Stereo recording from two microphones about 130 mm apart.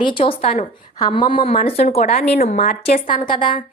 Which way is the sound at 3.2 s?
40° left (ahead or behind).